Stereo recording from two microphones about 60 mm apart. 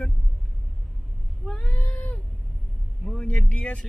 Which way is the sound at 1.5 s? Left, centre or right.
Left.